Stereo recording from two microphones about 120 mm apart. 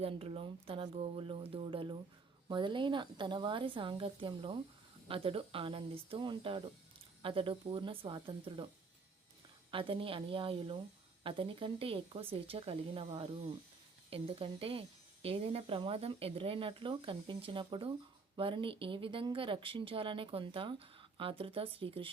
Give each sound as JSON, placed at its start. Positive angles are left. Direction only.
{"t": 0.0, "sound": "speech", "side_deg": -55}
{"t": 9.7, "sound": "speech", "side_deg": -50}